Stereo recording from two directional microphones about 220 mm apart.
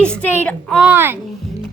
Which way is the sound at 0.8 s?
10° right (ahead or behind).